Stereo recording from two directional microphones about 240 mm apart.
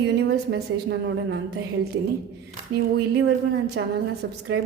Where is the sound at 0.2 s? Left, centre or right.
Right.